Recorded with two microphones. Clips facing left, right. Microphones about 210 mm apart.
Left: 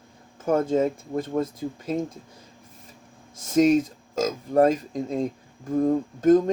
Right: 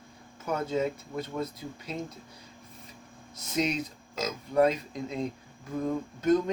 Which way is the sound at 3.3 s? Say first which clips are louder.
Left 11 dB; 50° left (ahead or behind).